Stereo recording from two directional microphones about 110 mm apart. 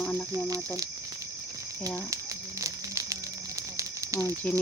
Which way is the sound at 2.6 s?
30° right (ahead or behind).